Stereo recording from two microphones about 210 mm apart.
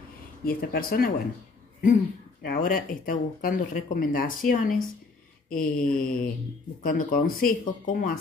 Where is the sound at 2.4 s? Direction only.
40° left (ahead or behind).